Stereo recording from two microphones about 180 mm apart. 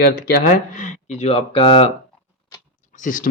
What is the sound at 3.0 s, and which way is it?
Speech, 50° left (ahead or behind).